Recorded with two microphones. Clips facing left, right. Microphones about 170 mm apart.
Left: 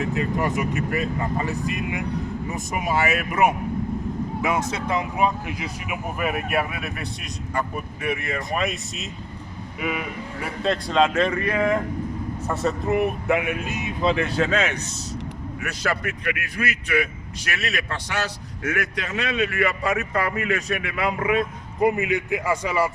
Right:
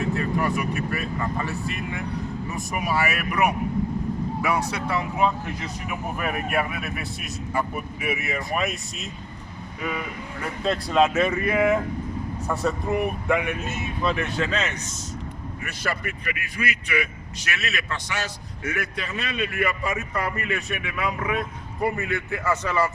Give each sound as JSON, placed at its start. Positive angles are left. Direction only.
{"t": 0.0, "sound": "speech", "side_deg": 20}
{"t": 10.6, "sound": "speech", "side_deg": 0}
{"t": 14.0, "sound": "speech", "side_deg": 30}
{"t": 14.5, "sound": "speech", "side_deg": 55}
{"t": 15.6, "sound": "speech", "side_deg": 75}
{"t": 16.6, "sound": "speech", "side_deg": 45}
{"t": 18.1, "sound": "a man's voice", "side_deg": 65}
{"t": 20.5, "sound": "speech", "side_deg": 40}
{"t": 21.8, "sound": "speech", "side_deg": 15}